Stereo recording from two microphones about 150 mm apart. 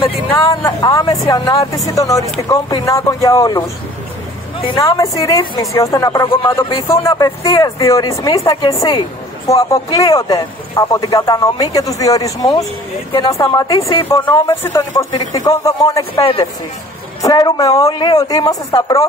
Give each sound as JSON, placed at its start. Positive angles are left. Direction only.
{"t": 0.3, "sound": "speech", "side_deg": 20}
{"t": 4.7, "sound": "speech", "side_deg": 20}